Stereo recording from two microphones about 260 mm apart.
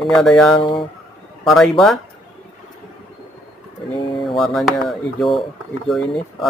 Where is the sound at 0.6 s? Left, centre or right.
Centre.